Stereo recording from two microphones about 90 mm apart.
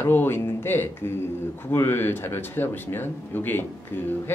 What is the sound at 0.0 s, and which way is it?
Speech, 25° left (ahead or behind).